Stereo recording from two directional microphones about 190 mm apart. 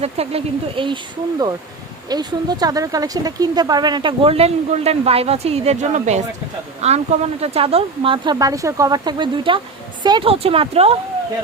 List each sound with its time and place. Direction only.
0.0 s speech: 30° right (ahead or behind)
2.0 s speech: 20° right (ahead or behind)